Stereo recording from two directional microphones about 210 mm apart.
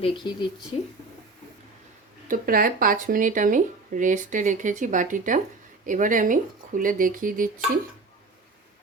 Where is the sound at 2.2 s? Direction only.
40° right (ahead or behind).